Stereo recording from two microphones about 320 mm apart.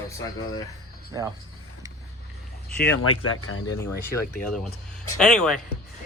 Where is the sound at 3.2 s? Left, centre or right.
Left.